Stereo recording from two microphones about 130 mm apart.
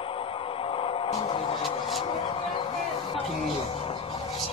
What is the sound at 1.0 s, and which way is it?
Music, 40° left (ahead or behind).